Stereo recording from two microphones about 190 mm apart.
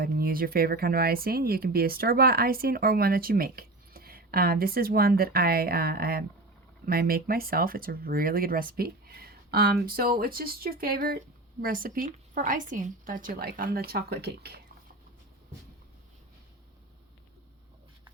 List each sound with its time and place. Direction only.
0.0 s speech: 50° right (ahead or behind)